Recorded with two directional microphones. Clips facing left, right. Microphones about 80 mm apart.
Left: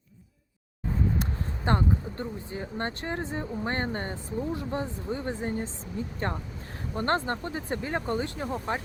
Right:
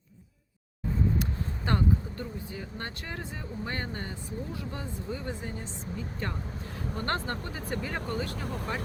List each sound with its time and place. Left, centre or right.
1.2 s speech: left